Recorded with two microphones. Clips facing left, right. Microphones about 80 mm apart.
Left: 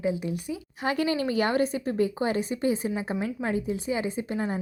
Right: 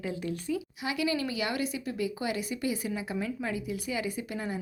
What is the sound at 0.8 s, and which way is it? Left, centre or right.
Speech, left.